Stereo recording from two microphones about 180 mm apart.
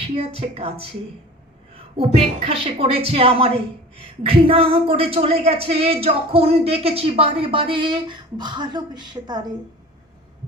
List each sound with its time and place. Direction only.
0.2 s a woman's voice: 30° right (ahead or behind)